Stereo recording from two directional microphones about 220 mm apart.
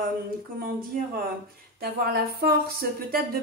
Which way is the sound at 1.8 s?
45° right (ahead or behind).